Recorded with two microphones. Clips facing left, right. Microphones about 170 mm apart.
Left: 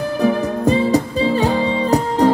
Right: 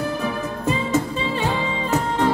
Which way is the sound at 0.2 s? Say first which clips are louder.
Left 9 dB; 40° left (ahead or behind).